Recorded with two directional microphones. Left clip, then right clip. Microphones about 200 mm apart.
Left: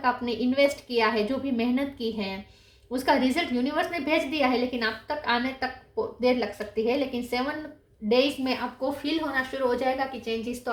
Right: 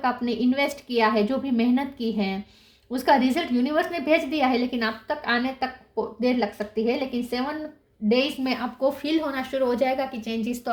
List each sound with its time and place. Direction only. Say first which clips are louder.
0.0 s a woman's voice: right 1 dB; 45° right (ahead or behind)
8.8 s a woman's voice: right 4 dB; 55° right (ahead or behind)